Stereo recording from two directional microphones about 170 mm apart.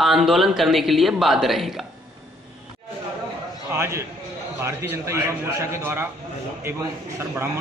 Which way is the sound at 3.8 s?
15° right (ahead or behind).